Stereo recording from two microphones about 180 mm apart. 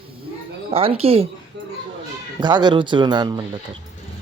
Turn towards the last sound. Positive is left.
turn(degrees=-25)  # may be behind; listen again after turning